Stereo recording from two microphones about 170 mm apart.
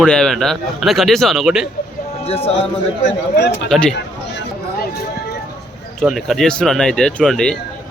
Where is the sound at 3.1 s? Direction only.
90° left.